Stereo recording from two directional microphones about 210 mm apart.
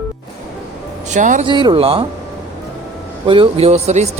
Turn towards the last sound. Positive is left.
turn(degrees=-30)  # may be behind; listen again after turning